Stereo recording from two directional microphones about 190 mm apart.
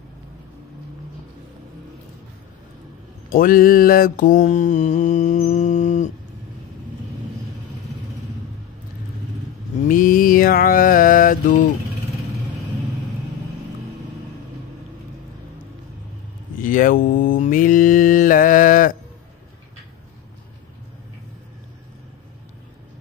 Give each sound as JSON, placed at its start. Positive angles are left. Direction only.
{"t": 3.3, "sound": "mantra", "side_deg": 50}
{"t": 9.8, "sound": "mantra", "side_deg": 45}
{"t": 16.6, "sound": "mantra", "side_deg": 45}